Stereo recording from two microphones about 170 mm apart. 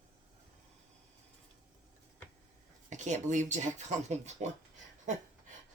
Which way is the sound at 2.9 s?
45° right (ahead or behind).